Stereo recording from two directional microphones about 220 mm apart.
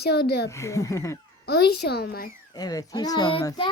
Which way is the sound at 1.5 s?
45° left (ahead or behind).